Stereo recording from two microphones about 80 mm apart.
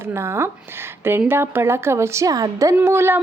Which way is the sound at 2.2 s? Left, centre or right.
Right.